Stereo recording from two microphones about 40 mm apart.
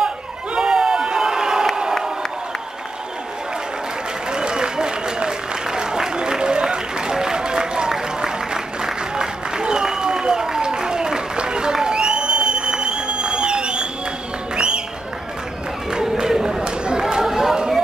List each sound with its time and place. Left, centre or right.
0.6 s crowd: centre
4.3 s applause: centre
14.5 s music: right
15.9 s run: centre